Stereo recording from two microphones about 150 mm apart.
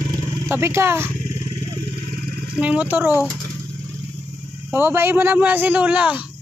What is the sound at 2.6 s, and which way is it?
Speech, 10° right (ahead or behind).